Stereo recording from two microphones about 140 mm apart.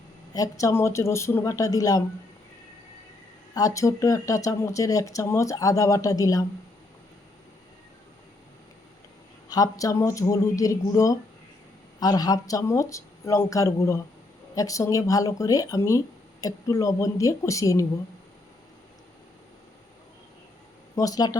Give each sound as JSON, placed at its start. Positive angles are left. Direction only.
{"t": 0.3, "sound": "speech", "side_deg": 25}
{"t": 3.5, "sound": "speech", "side_deg": 25}
{"t": 9.5, "sound": "speech", "side_deg": 25}
{"t": 20.9, "sound": "speech", "side_deg": 25}